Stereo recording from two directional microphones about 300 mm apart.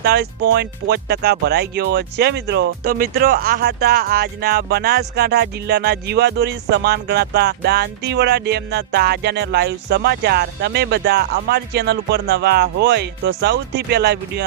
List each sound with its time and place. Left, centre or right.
0.0 s speech: right